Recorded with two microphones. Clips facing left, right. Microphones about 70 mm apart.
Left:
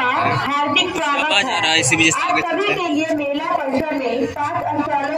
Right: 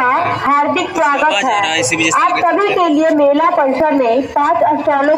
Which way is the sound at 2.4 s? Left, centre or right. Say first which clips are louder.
Right 8 dB; right.